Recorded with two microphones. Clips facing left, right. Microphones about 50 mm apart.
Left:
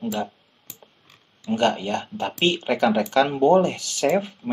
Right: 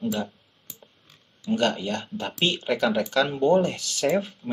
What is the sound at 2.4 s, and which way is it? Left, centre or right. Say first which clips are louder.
Speech: left 3 dB; left.